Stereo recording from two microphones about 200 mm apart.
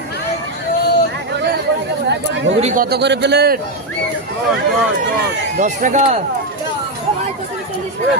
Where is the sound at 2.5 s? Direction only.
35° right (ahead or behind).